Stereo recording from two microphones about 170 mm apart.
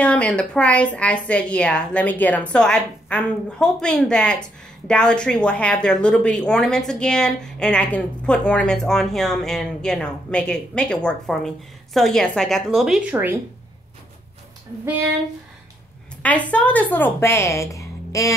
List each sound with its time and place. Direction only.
0.0 s a woman's voice: 5° left (ahead or behind); by 13.4 s 10° right (ahead or behind)
16.2 s a woman's voice: 10° left (ahead or behind)